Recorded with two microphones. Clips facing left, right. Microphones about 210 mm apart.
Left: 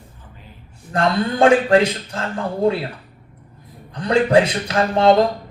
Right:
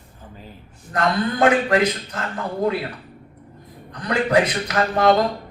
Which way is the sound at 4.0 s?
30° left (ahead or behind).